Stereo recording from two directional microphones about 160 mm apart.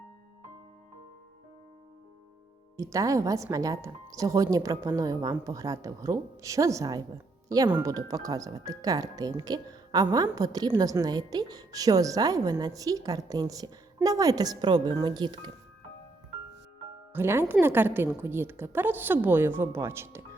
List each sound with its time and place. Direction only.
2.7 s a woman's voice: 20° right (ahead or behind)
17.1 s a woman's voice: 15° right (ahead or behind)